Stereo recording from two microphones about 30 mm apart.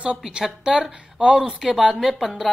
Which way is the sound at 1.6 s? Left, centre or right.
Centre.